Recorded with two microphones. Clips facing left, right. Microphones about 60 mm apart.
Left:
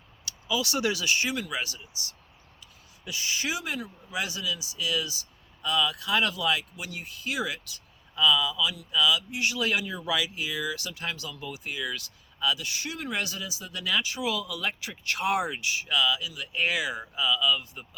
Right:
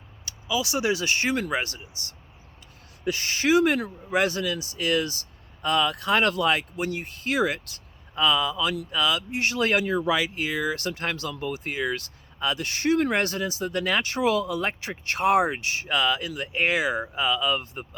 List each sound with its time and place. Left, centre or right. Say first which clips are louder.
0.4 s speech: right 3 dB; centre
1.0 s speech: right 3 dB; right